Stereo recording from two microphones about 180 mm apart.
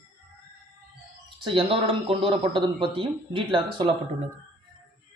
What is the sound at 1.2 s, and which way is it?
Speech, 30° right (ahead or behind).